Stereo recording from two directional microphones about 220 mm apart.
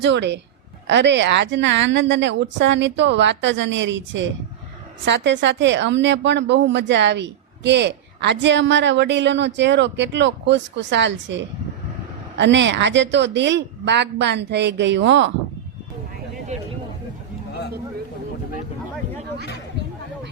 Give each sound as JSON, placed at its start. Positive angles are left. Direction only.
{"t": 0.0, "sound": "a woman's voice", "side_deg": -55}
{"t": 16.5, "sound": "speech", "side_deg": -30}